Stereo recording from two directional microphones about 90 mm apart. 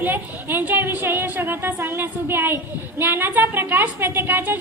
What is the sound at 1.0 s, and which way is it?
Speech, 25° right (ahead or behind).